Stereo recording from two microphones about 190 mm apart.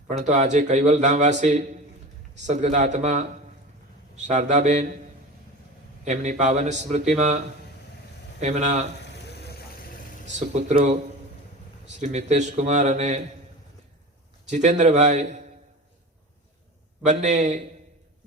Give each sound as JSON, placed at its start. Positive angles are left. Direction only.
{"t": 0.1, "sound": "a man's voice", "side_deg": -40}
{"t": 4.3, "sound": "a man's voice", "side_deg": -40}
{"t": 6.1, "sound": "a man's voice", "side_deg": -40}
{"t": 9.2, "sound": "vehicle", "side_deg": 60}
{"t": 10.2, "sound": "a man's voice", "side_deg": -40}
{"t": 11.9, "sound": "a man's voice", "side_deg": -35}
{"t": 14.4, "sound": "a man's voice", "side_deg": -40}
{"t": 17.0, "sound": "a man's voice", "side_deg": -35}